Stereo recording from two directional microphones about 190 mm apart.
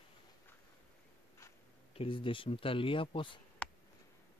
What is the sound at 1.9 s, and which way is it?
Speech, 30° left (ahead or behind).